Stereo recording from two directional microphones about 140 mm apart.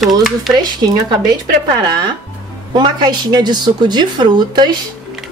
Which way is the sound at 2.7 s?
30° right (ahead or behind).